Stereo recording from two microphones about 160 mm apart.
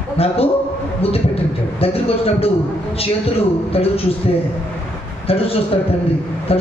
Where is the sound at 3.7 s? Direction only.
35° left (ahead or behind).